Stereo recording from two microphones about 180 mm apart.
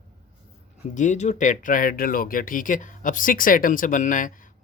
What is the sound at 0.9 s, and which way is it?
Speech, 45° left (ahead or behind).